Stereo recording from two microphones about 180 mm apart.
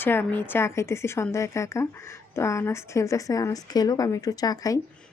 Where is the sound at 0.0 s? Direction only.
10° left (ahead or behind).